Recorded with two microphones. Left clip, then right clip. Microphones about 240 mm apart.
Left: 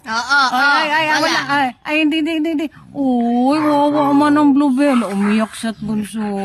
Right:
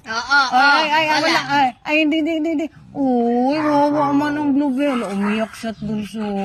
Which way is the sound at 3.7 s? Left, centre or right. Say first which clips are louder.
Left 1 dB; left.